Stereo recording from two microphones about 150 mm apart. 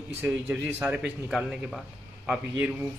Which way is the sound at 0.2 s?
15° right (ahead or behind).